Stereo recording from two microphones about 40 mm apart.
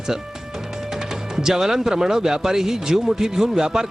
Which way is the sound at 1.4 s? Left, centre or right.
Centre.